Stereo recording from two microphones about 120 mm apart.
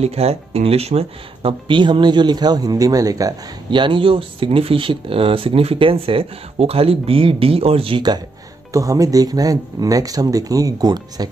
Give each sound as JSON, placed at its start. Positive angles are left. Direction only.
{"t": 0.0, "sound": "speech", "side_deg": -60}
{"t": 8.7, "sound": "speech", "side_deg": -30}